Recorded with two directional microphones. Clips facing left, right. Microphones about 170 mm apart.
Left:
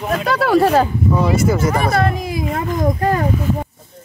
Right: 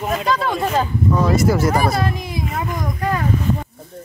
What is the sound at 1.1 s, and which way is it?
Speech, 10° left (ahead or behind).